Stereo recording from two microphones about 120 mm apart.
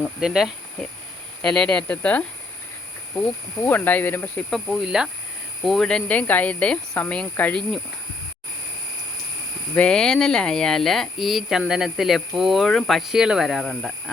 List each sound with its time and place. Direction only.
0.2 s speech: 5° right (ahead or behind); by 2.2 s 10° left (ahead or behind)
3.6 s speech: 15° left (ahead or behind)
4.4 s speech: 5° left (ahead or behind)
9.7 s speech: 10° left (ahead or behind)